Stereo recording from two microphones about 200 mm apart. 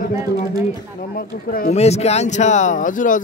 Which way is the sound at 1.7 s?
30° left (ahead or behind).